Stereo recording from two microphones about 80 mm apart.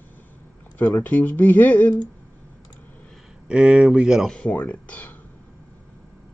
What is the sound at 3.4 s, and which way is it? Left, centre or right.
Speech, centre.